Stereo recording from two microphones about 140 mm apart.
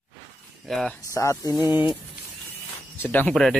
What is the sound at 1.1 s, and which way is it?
Speech, 20° left (ahead or behind).